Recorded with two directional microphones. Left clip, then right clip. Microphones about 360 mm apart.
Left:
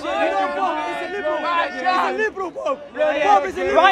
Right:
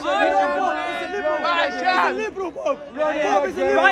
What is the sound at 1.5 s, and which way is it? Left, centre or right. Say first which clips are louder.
Speech: even; right.